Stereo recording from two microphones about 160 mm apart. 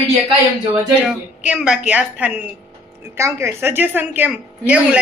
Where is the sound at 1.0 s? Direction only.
5° right (ahead or behind).